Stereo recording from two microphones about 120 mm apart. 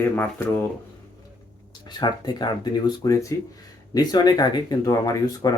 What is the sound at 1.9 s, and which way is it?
Speech, 35° left (ahead or behind).